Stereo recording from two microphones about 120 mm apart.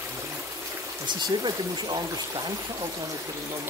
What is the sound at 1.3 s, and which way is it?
Speech, 35° right (ahead or behind).